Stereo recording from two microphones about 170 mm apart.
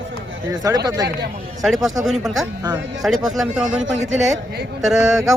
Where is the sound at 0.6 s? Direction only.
20° right (ahead or behind).